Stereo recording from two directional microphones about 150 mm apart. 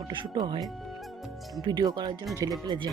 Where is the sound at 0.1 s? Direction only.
30° right (ahead or behind).